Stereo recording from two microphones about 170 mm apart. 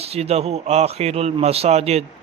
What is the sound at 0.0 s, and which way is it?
Speech, 35° right (ahead or behind).